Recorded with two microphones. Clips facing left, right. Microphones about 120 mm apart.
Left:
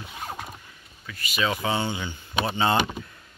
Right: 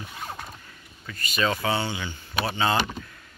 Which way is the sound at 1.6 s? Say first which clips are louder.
Even; 20° left (ahead or behind).